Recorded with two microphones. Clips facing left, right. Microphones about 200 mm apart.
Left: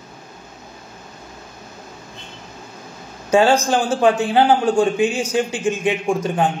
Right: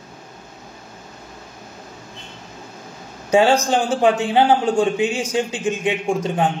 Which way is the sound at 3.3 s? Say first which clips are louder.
Even; 20° right (ahead or behind).